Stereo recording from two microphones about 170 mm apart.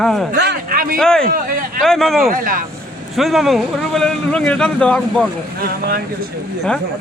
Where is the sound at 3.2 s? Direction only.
Centre (ahead or behind).